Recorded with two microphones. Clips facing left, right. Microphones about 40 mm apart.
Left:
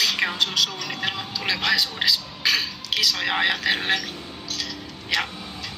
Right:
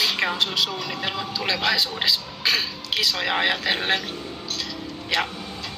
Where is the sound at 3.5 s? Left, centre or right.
Right.